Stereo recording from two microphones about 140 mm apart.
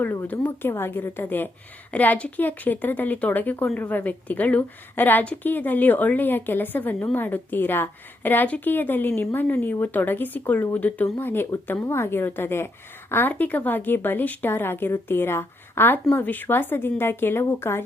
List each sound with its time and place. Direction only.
0.0 s a woman's voice: 15° left (ahead or behind)